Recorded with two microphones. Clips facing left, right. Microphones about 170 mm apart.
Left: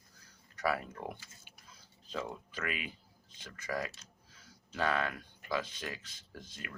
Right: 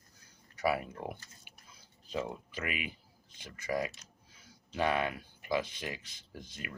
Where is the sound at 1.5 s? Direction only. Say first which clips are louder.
Right 1 dB; 15° right (ahead or behind).